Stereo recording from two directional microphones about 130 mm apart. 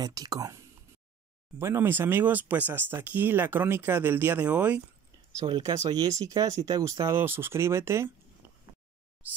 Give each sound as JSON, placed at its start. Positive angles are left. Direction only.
{"t": 0.0, "sound": "speech", "side_deg": -30}
{"t": 1.6, "sound": "speech", "side_deg": -15}
{"t": 5.4, "sound": "speech", "side_deg": -30}
{"t": 8.4, "sound": "a sound", "side_deg": -20}